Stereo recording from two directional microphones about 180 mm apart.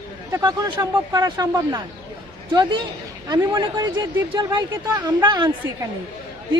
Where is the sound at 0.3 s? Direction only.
15° right (ahead or behind).